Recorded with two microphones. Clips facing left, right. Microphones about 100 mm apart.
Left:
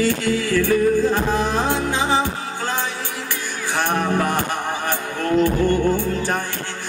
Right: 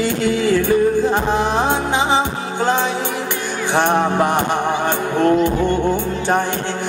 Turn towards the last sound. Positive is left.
turn(degrees=-20)  # may be behind; listen again after turning